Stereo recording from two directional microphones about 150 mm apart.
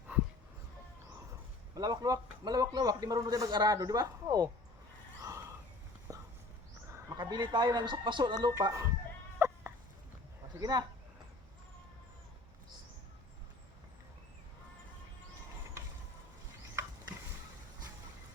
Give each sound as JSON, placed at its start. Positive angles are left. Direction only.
{"t": 0.1, "sound": "dog", "side_deg": -10}
{"t": 1.7, "sound": "a man's voice", "side_deg": -25}
{"t": 5.2, "sound": "a sound", "side_deg": -20}
{"t": 7.2, "sound": "a man's voice", "side_deg": -30}
{"t": 9.4, "sound": "a sound", "side_deg": -15}
{"t": 10.6, "sound": "a man's voice", "side_deg": -25}